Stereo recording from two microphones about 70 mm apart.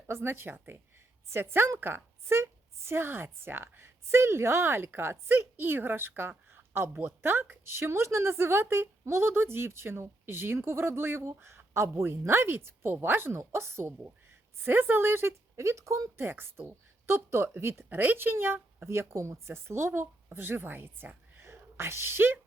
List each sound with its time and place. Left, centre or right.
0.1 s a woman's voice: right
16.2 s a woman's voice: right
17.8 s a woman's voice: right
21.3 s a sound: right